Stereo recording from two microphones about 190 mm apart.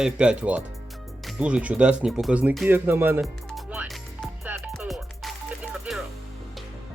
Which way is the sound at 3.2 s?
Centre (ahead or behind).